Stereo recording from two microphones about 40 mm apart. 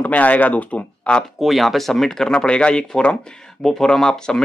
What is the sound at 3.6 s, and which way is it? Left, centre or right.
Speech, centre.